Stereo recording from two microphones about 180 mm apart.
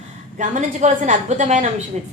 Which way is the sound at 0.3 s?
45° right (ahead or behind).